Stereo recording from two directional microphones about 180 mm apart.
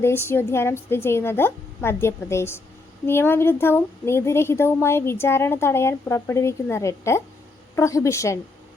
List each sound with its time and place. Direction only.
0.0 s a woman's voice: 15° left (ahead or behind)